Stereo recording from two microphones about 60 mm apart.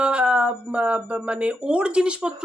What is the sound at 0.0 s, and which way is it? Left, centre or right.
Speech, centre.